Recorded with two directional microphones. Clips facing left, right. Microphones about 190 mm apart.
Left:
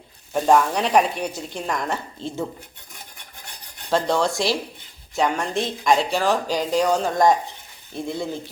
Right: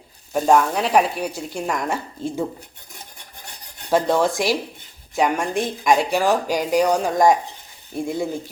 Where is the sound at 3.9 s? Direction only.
15° right (ahead or behind).